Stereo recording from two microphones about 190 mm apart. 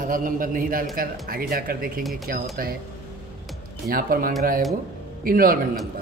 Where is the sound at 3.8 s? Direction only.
50° right (ahead or behind).